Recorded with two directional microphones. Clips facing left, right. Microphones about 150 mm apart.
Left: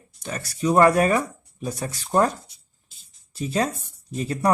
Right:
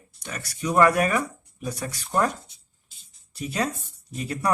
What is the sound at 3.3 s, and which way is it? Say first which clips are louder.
Speech: left 3 dB; 30° left (ahead or behind).